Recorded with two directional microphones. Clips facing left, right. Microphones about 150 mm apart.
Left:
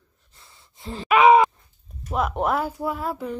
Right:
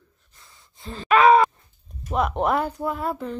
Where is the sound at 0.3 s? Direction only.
25° left (ahead or behind).